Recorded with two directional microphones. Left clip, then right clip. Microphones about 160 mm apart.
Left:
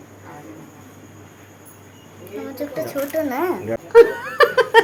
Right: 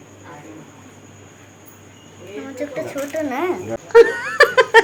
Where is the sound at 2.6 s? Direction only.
10° left (ahead or behind).